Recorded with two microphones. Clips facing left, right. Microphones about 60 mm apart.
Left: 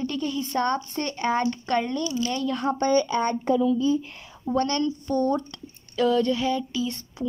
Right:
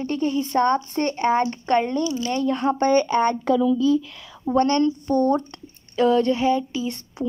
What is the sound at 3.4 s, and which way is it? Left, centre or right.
Speech, right.